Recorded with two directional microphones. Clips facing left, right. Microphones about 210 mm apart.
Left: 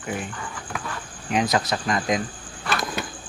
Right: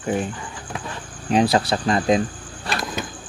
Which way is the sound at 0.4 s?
20° right (ahead or behind).